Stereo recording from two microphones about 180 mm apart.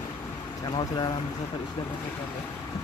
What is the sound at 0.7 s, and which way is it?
Speech, 25° left (ahead or behind).